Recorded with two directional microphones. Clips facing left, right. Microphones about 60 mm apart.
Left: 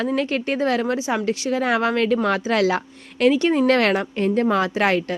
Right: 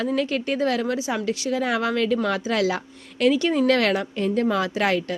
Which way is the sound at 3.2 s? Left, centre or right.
Left.